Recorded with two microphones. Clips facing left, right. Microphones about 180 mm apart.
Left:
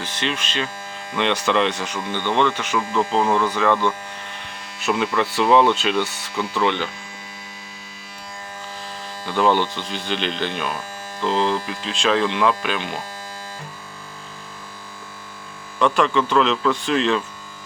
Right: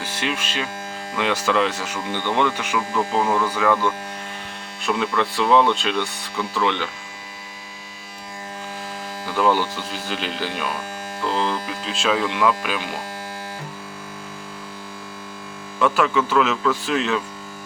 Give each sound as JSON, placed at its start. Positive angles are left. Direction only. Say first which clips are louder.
{"t": 0.0, "sound": "speech", "louder": "even", "side_deg": -10}
{"t": 4.8, "sound": "speech", "louder": "left 1 dB", "side_deg": 0}
{"t": 9.2, "sound": "speech", "louder": "left 1 dB", "side_deg": -5}
{"t": 11.8, "sound": "speech", "louder": "left 1 dB", "side_deg": -5}
{"t": 15.8, "sound": "speech", "louder": "left 1 dB", "side_deg": -5}